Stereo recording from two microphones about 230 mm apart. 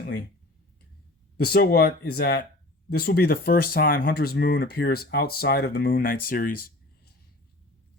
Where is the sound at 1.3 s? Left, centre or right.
Left.